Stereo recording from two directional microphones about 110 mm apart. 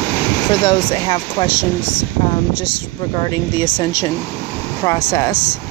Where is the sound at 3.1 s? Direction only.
40° left (ahead or behind).